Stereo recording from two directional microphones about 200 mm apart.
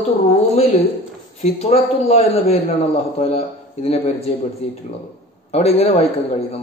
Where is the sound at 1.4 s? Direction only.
30° left (ahead or behind).